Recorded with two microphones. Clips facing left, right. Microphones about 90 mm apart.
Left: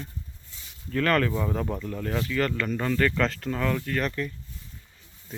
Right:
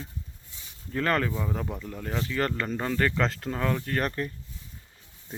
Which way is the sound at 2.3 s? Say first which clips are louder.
Left 1 dB; 30° right (ahead or behind).